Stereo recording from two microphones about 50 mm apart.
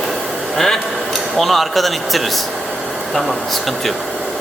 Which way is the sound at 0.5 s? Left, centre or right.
Centre.